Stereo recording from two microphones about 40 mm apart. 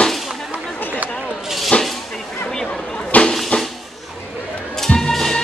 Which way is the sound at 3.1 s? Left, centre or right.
Left.